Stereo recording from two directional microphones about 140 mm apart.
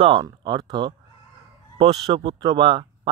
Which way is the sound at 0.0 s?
35° right (ahead or behind).